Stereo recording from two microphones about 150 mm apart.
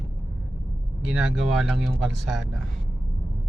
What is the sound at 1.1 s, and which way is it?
Speech, 5° right (ahead or behind).